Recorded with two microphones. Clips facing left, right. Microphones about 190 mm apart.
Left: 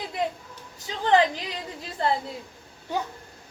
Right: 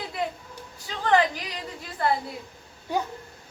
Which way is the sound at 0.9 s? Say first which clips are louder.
Left 2 dB; 20° left (ahead or behind).